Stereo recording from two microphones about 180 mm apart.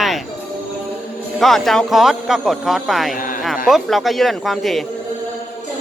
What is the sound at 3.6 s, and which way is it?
Speech, centre (ahead or behind).